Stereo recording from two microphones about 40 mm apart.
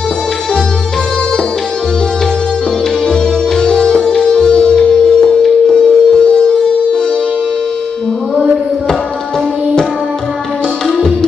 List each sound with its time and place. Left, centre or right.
3.1 s music: centre
4.1 s music: centre